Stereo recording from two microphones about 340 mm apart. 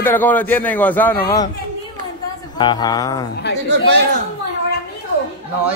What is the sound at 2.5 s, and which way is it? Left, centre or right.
Speech, centre.